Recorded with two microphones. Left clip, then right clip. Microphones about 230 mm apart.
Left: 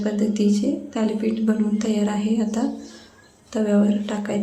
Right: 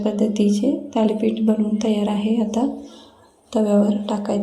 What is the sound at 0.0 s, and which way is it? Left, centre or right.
A woman's voice, centre.